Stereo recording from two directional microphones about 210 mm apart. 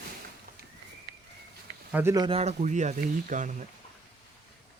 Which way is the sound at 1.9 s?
10° right (ahead or behind).